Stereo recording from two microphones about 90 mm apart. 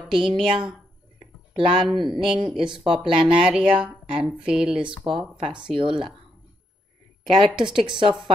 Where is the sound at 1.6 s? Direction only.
75° right (ahead or behind).